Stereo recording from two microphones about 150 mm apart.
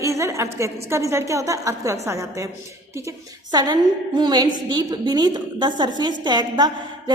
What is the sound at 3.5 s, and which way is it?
A woman's voice, 25° right (ahead or behind).